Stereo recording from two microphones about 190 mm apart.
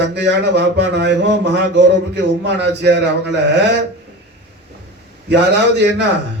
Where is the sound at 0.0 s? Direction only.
65° right (ahead or behind).